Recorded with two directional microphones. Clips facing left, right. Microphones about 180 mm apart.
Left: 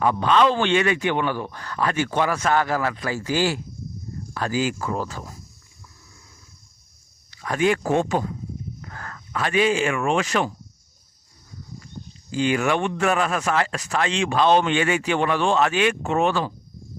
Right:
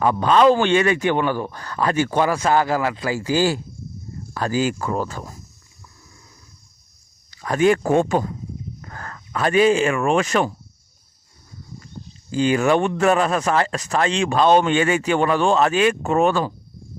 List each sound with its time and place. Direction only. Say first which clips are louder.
0.0 s speech: right 3 dB; 40° right (ahead or behind)
7.4 s speech: right 4 dB; 40° right (ahead or behind)
8.8 s speech: right 2 dB; 40° right (ahead or behind)
12.3 s speech: right 4 dB; 40° right (ahead or behind)